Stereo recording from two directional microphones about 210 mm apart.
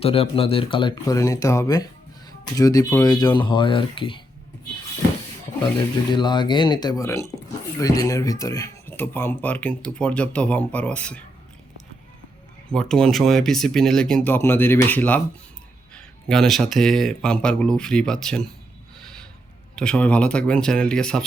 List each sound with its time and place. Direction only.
0.0 s speech: 25° left (ahead or behind)
6.1 s speech: 20° left (ahead or behind); by 11.2 s 5° left (ahead or behind)
12.6 s speech: 5° left (ahead or behind)
19.7 s speech: 5° left (ahead or behind)